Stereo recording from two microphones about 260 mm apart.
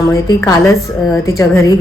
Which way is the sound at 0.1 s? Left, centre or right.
Centre.